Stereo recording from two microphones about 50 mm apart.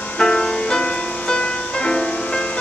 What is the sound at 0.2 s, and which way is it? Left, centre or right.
Music, centre.